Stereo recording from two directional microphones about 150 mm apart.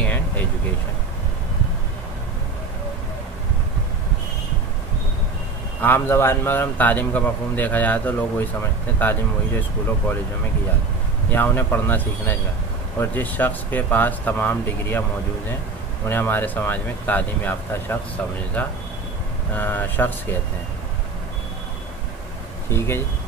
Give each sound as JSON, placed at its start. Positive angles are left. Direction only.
{"t": 5.8, "sound": "a man's voice", "side_deg": 15}
{"t": 11.3, "sound": "a man's voice", "side_deg": 15}
{"t": 22.7, "sound": "a man's voice", "side_deg": 15}